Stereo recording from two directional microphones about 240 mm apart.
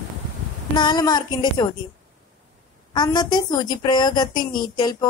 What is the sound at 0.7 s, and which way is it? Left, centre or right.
Speech, centre.